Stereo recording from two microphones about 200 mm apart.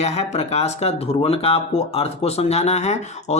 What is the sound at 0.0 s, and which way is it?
Speech, 30° left (ahead or behind).